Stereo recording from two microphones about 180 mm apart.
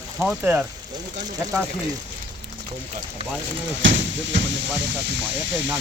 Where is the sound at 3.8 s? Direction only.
90° right.